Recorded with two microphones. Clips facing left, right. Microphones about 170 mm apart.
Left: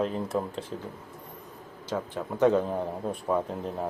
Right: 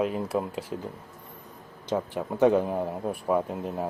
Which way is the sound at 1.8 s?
15° right (ahead or behind).